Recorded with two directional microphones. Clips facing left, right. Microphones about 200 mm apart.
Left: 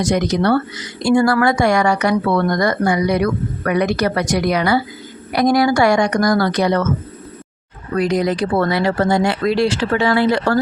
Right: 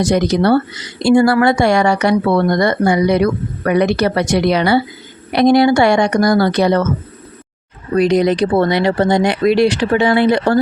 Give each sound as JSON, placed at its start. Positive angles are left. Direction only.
{"t": 0.0, "sound": "speech", "side_deg": -30}
{"t": 7.9, "sound": "speech", "side_deg": -20}